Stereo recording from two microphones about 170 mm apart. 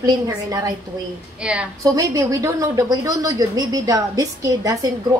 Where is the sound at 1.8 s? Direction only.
20° right (ahead or behind).